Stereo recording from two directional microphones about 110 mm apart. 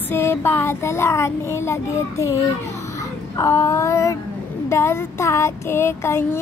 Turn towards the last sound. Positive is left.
turn(degrees=20)  # may be behind; listen again after turning